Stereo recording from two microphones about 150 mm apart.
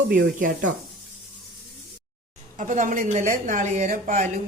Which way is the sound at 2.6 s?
60° right (ahead or behind).